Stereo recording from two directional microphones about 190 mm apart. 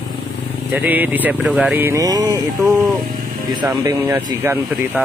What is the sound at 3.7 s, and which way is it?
Speech, 20° right (ahead or behind).